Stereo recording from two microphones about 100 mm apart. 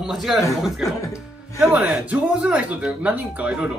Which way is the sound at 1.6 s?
10° right (ahead or behind).